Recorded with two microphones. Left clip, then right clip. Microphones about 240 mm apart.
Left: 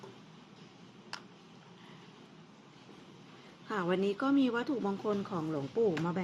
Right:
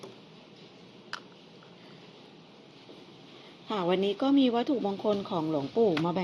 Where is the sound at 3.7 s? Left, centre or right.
Centre.